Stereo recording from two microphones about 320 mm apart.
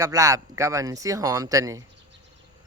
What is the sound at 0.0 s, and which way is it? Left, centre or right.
Speech, centre.